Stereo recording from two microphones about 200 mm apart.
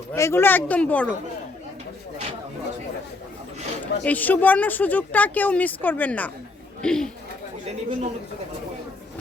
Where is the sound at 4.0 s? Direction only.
10° left (ahead or behind).